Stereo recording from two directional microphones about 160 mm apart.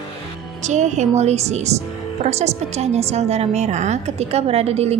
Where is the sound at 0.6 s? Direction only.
45° right (ahead or behind).